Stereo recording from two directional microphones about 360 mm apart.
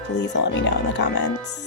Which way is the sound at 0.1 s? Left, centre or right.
Left.